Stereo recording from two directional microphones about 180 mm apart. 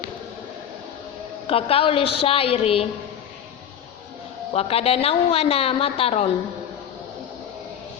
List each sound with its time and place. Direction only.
1.5 s a woman's voice: 30° left (ahead or behind)
4.5 s a woman's voice: 35° left (ahead or behind)